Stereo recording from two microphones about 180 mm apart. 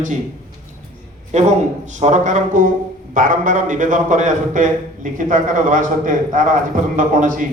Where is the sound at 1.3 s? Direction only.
40° right (ahead or behind).